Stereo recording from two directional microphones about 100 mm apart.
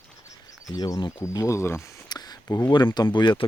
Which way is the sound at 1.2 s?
30° left (ahead or behind).